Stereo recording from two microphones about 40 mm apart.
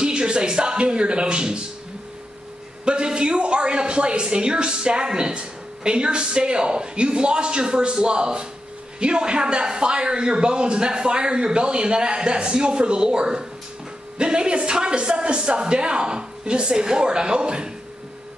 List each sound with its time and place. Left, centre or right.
0.0 s speech: right
2.8 s speech: right